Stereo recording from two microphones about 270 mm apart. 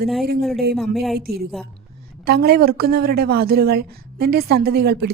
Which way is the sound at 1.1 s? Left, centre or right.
Right.